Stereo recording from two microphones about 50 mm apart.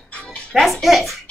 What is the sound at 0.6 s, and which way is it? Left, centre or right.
Speech, centre.